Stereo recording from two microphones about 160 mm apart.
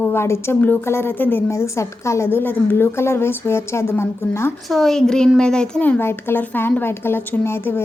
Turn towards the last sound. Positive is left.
turn(degrees=15)  # may be behind; listen again after turning